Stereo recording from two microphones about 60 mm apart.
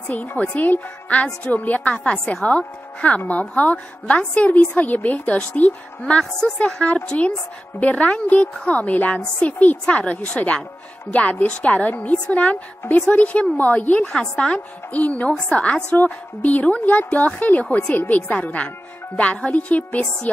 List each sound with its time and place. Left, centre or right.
0.1 s a woman's voice: left